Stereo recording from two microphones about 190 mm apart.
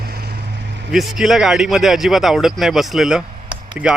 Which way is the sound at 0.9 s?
Centre (ahead or behind).